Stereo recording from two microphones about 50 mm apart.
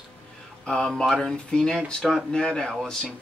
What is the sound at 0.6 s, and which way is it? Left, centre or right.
Speech, centre.